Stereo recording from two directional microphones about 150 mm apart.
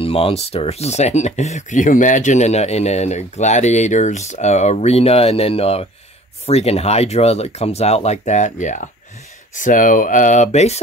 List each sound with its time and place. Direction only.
0.0 s speech: 40° left (ahead or behind)